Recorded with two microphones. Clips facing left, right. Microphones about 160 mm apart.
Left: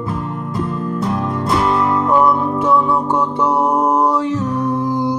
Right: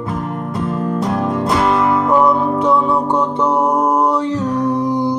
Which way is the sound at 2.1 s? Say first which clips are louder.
Even; 15° right (ahead or behind).